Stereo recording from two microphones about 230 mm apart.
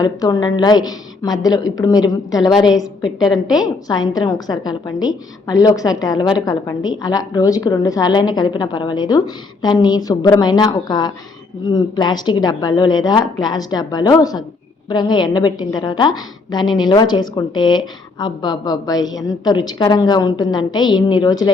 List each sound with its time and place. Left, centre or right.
0.0 s a woman's voice: centre
3.2 s a woman's voice: centre
3.8 s a woman's voice: centre